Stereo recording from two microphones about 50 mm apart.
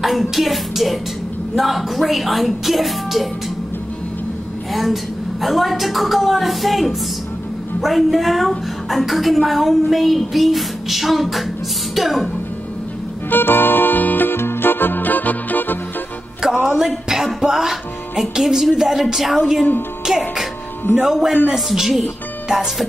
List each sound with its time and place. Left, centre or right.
0.0 s a woman's voice: centre
5.4 s a woman's voice: centre
13.3 s music: left
16.6 s speech: centre
21.5 s a woman's voice: centre